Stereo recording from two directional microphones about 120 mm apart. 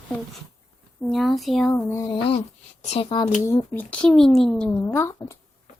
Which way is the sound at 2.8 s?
55° left (ahead or behind).